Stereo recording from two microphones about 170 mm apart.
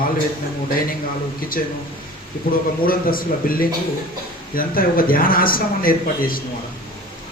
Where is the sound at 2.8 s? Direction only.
55° left (ahead or behind).